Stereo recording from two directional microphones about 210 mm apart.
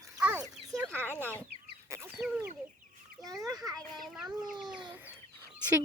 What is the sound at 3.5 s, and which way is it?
Children playing, 20° right (ahead or behind).